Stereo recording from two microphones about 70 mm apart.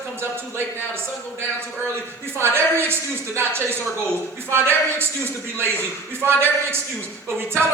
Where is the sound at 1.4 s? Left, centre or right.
Right.